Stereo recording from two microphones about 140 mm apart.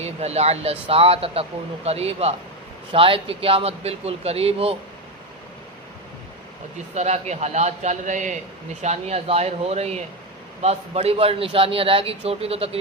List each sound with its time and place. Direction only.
0.0 s speech: 50° right (ahead or behind)
6.9 s a man's voice: 55° right (ahead or behind)
8.8 s speech: 50° right (ahead or behind)